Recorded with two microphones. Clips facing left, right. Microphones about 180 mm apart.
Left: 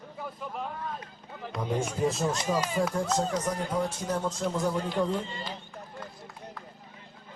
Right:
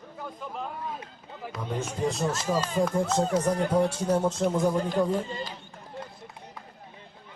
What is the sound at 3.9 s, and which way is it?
Speech, 25° right (ahead or behind).